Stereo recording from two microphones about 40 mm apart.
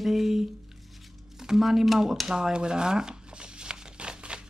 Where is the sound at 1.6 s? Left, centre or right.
Centre.